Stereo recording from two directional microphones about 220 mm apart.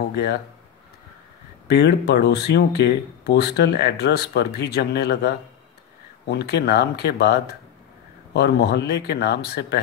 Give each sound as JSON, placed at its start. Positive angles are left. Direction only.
{"t": 0.1, "sound": "speech", "side_deg": 45}
{"t": 1.7, "sound": "speech", "side_deg": 50}